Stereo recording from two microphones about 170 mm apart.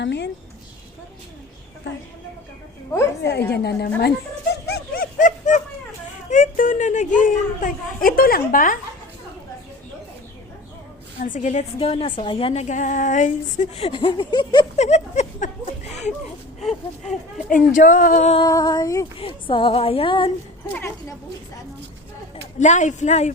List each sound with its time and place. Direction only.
0.0 s speech: 90° left
3.2 s a woman's voice: 75° left (ahead or behind)
4.7 s dog: 60° left (ahead or behind)
6.3 s a woman's voice: 50° left (ahead or behind)
11.3 s a woman's voice: 45° left (ahead or behind)
11.8 s a woman's voice: 35° left (ahead or behind)
14.8 s a sound: 40° left (ahead or behind)
16.6 s speech: centre (ahead or behind)
17.5 s a woman's voice: 50° left (ahead or behind)
18.4 s female singing: 20° left (ahead or behind)
19.2 s a woman's voice: 30° left (ahead or behind)
22.6 s a woman's voice: 45° left (ahead or behind)